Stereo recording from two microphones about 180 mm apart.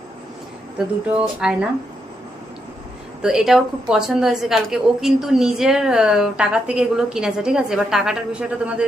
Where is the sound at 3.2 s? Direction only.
5° right (ahead or behind).